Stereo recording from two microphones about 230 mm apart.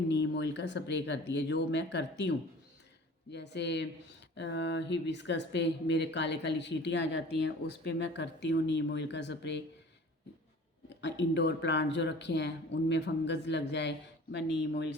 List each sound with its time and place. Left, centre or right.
0.1 s speech: left
10.8 s speech: left